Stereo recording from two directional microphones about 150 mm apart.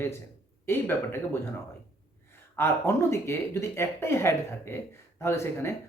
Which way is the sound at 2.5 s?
15° left (ahead or behind).